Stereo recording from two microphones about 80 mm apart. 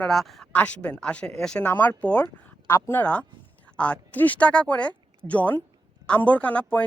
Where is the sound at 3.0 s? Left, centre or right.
Centre.